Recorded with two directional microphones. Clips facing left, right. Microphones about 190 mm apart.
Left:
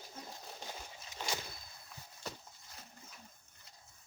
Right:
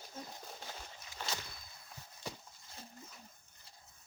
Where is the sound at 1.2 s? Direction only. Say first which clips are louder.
Left 2 dB; 15° left (ahead or behind).